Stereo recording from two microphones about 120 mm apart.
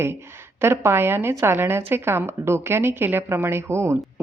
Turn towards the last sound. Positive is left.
turn(degrees=-20)  # may be behind; listen again after turning